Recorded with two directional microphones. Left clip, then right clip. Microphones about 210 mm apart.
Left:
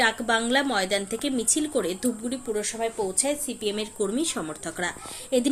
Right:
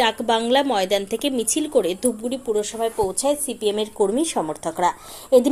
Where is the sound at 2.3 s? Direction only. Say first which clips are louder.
Right 6 dB; 5° right (ahead or behind).